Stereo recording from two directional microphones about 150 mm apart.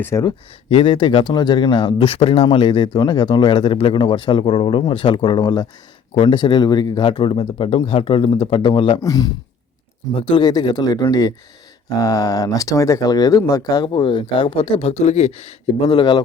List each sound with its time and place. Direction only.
0.0 s speech: 20° left (ahead or behind)
0.3 s speech: 35° left (ahead or behind)
9.0 s speech: 25° left (ahead or behind)
10.2 s speech: 35° left (ahead or behind)